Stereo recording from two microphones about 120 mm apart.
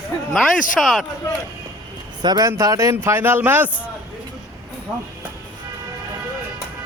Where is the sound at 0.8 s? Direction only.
Centre (ahead or behind).